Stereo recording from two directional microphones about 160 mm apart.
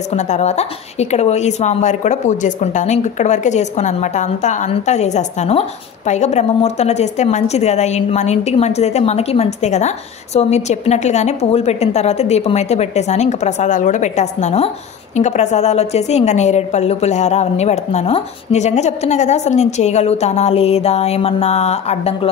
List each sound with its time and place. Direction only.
0.1 s a woman's voice: 45° left (ahead or behind)